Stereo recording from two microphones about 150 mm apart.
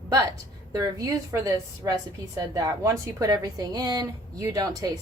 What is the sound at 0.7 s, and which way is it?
A woman's voice, 25° right (ahead or behind).